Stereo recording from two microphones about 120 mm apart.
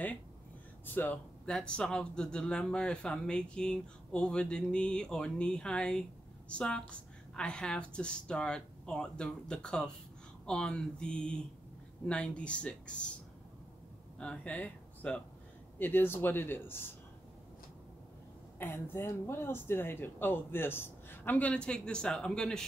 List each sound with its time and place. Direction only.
0.8 s speech: 15° left (ahead or behind)
14.1 s speech: 10° left (ahead or behind)
18.6 s speech: 20° left (ahead or behind)